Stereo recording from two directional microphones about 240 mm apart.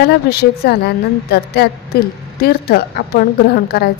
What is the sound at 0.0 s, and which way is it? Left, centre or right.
A woman's voice, left.